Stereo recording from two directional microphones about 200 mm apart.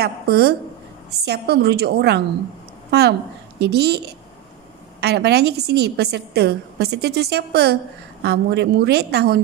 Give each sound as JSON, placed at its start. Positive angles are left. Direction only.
{"t": 0.0, "sound": "a woman's voice", "side_deg": -55}
{"t": 5.0, "sound": "a woman's voice", "side_deg": -55}